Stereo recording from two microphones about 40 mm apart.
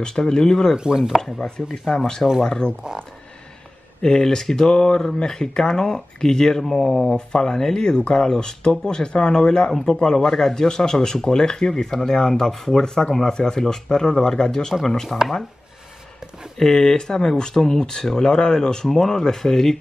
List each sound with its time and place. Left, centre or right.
0.0 s speech: centre
0.7 s chopping: centre
1.2 s speech: centre
4.0 s speech: centre
7.2 s speech: centre
16.5 s speech: centre